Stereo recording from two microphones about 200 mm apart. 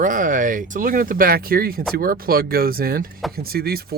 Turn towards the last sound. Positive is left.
turn(degrees=-50)  # may be behind; listen again after turning